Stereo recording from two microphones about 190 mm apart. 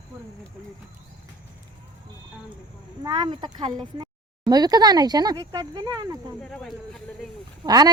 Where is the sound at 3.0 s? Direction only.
20° right (ahead or behind).